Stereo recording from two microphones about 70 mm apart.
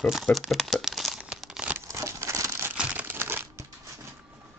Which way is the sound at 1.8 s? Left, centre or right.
Right.